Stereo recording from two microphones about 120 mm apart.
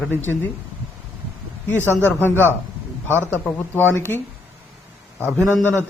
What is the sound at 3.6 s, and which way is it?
Speech, 15° left (ahead or behind).